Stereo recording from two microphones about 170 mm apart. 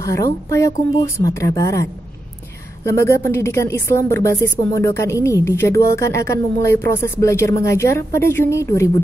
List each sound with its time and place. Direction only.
0.0 s a woman's voice: 15° left (ahead or behind)
2.9 s a woman's voice: 15° left (ahead or behind)